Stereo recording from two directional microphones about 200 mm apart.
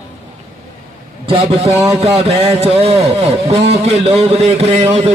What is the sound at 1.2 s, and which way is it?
A man's voice, 30° right (ahead or behind).